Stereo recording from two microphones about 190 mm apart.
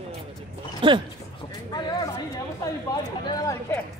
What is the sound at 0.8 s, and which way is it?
Speech, 25° right (ahead or behind).